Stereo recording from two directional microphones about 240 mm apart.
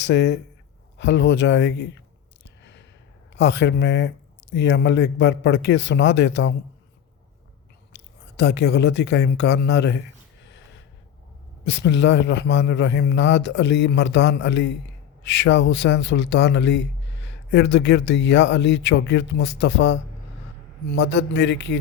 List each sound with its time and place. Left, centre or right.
0.0 s a man's voice: left
0.9 s a sound: left
3.3 s a man's voice: left
7.9 s speech: left
11.6 s a man's voice: left